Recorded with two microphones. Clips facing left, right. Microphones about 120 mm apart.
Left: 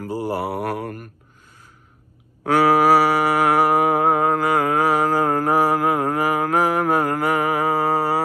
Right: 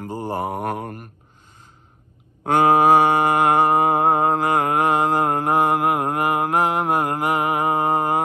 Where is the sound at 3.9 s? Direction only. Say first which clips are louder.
Even; 25° right (ahead or behind).